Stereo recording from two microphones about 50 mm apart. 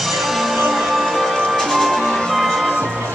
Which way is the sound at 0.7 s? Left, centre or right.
Centre.